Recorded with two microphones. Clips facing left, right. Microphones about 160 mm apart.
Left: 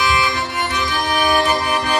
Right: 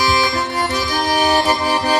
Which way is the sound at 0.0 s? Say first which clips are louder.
Right 2 dB; 40° right (ahead or behind).